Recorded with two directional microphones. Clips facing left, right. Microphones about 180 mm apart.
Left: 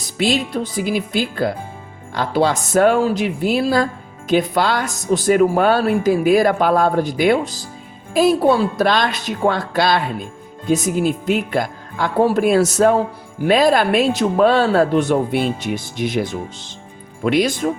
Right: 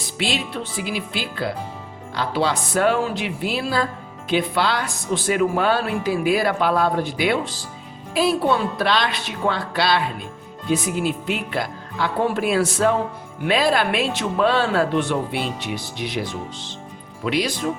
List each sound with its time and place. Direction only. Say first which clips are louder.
0.2 s speech: left 7 dB; 45° left (ahead or behind)